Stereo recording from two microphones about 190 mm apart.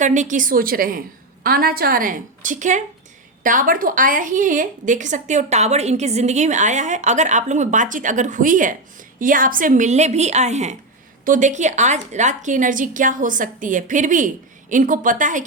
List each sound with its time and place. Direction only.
0.0 s a woman's voice: 40° right (ahead or behind)